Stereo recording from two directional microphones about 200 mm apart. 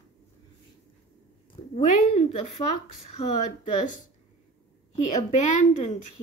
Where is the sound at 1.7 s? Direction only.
35° left (ahead or behind).